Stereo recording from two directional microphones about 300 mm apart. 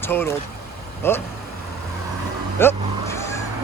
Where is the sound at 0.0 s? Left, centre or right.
Centre.